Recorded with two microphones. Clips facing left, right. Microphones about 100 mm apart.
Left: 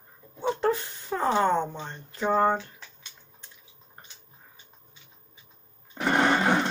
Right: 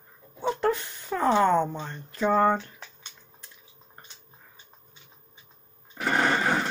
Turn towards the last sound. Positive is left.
turn(degrees=20)  # may be behind; listen again after turning